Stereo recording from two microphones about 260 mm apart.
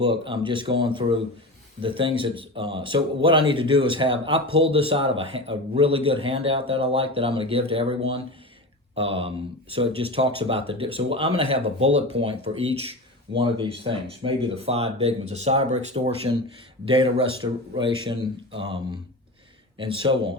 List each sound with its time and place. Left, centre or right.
0.0 s a man's voice: centre